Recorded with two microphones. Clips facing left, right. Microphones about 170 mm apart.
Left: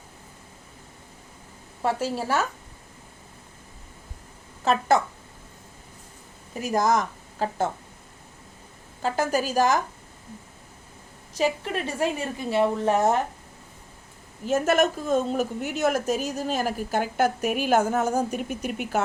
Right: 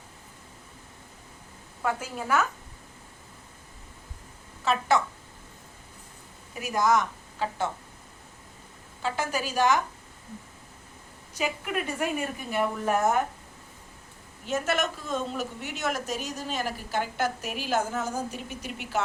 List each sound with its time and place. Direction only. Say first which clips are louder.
1.8 s a woman's voice: left 5 dB; 30° left (ahead or behind)
4.6 s a woman's voice: left 4 dB; 45° left (ahead or behind)
6.5 s a woman's voice: left 2 dB; 40° left (ahead or behind)
9.0 s a woman's voice: left 5 dB; 40° left (ahead or behind)
11.3 s a woman's voice: left 5 dB; 35° left (ahead or behind)
14.4 s a woman's voice: left 7 dB; 45° left (ahead or behind)